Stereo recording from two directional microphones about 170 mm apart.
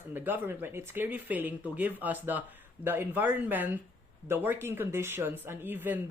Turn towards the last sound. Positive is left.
turn(degrees=-10)  # may be behind; listen again after turning